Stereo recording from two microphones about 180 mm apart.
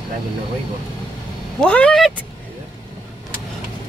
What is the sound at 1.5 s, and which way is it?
Vehicle, 5° left (ahead or behind).